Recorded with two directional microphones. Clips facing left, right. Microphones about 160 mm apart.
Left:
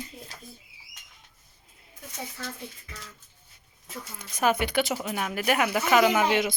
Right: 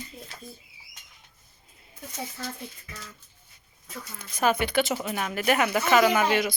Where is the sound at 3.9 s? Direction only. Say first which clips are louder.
Even; 10° left (ahead or behind).